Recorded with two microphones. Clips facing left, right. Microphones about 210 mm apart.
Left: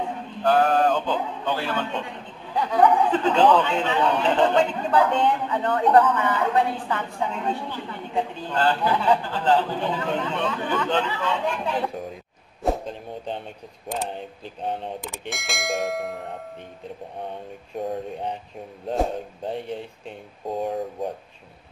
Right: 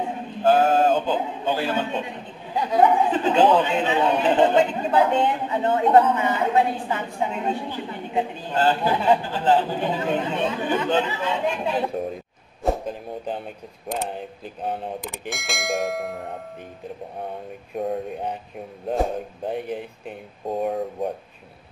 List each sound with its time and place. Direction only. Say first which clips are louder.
0.4 s a sound: right 2 dB; 25° right (ahead or behind)
1.0 s a man's voice: right 2 dB; 10° right (ahead or behind)
12.6 s a sound: right 1 dB; centre (ahead or behind)
13.8 s speech: right 1 dB; centre (ahead or behind)
17.7 s speech: right 2 dB; centre (ahead or behind)
19.5 s speech: right 2 dB; 5° right (ahead or behind)